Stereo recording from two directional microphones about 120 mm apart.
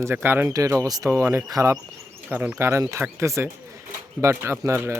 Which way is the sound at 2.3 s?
15° right (ahead or behind).